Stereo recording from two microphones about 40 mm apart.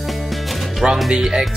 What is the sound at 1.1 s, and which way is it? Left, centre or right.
Speech, centre.